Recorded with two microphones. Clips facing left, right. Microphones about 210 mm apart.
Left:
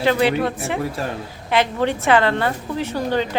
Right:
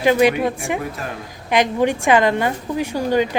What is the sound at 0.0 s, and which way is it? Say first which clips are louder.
Speech: right 3 dB; 15° right (ahead or behind).